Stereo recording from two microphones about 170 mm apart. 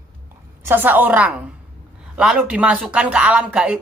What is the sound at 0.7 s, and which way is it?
Speech, 10° right (ahead or behind).